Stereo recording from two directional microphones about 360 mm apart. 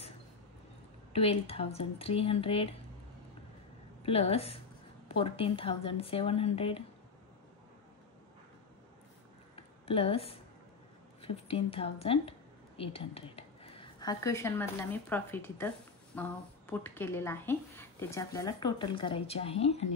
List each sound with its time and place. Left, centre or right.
1.1 s speech: centre
4.0 s speech: centre
9.6 s a sound: centre
11.1 s a woman's voice: centre